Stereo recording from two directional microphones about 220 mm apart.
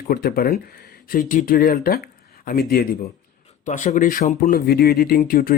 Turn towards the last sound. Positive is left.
turn(degrees=40)  # may be behind; listen again after turning